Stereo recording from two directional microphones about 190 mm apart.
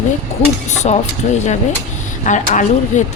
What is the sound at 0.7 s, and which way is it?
Speech, 35° left (ahead or behind).